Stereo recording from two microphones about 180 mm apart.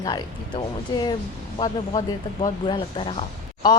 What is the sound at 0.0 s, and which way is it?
Speech, 25° left (ahead or behind).